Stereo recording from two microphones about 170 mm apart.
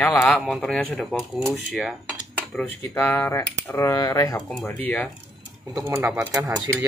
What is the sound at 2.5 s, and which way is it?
Speech, 10° left (ahead or behind).